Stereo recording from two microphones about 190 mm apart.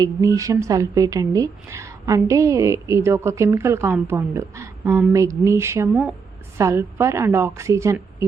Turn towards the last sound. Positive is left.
turn(degrees=-15)  # may be behind; listen again after turning